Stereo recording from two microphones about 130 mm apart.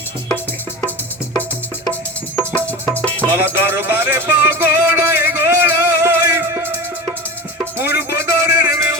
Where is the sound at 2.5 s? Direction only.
10° left (ahead or behind).